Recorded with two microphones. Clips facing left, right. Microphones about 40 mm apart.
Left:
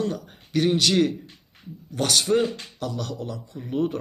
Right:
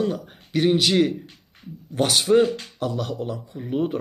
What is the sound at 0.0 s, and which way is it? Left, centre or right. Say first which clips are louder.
Speech: right 3 dB; centre.